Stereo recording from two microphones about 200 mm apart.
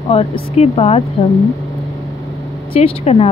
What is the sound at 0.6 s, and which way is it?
Speech, 30° left (ahead or behind).